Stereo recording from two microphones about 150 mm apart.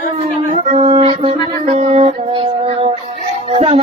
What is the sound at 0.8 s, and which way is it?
Music, 35° right (ahead or behind).